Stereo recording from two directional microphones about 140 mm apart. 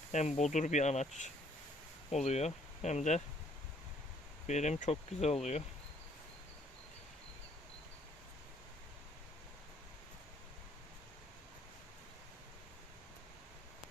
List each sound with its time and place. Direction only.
0.1 s speech: 55° left (ahead or behind)
4.4 s speech: 55° left (ahead or behind)